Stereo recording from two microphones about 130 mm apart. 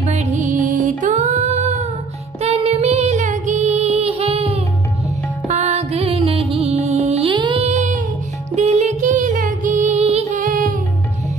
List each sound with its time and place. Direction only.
0.0 s music: 60° right (ahead or behind)
7.3 s music: 35° right (ahead or behind)
7.6 s child singing: 70° right (ahead or behind)
8.5 s music: 60° right (ahead or behind)
10.3 s music: 90° right